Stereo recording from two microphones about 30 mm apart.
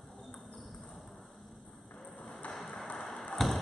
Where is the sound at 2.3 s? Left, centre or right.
Left.